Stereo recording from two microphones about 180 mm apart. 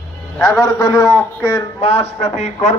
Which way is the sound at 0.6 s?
20° left (ahead or behind).